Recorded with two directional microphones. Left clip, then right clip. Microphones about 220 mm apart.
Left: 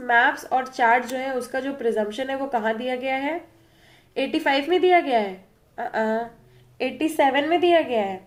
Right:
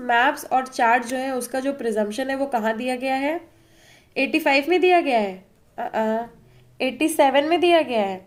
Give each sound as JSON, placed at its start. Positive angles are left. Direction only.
{"t": 0.1, "sound": "a woman's voice", "side_deg": -40}